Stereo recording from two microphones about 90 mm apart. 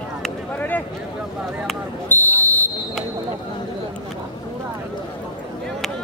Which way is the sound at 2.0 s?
20° left (ahead or behind).